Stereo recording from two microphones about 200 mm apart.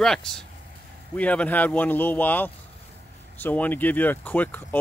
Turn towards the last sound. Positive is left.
turn(degrees=10)  # may be behind; listen again after turning